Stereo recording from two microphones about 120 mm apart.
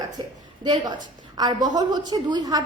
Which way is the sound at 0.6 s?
40° right (ahead or behind).